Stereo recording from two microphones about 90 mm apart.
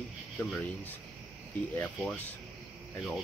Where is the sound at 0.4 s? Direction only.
20° left (ahead or behind).